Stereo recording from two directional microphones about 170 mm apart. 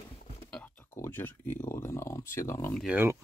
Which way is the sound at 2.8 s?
5° right (ahead or behind).